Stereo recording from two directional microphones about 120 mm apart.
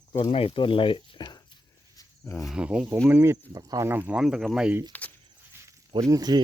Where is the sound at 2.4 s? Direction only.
5° right (ahead or behind).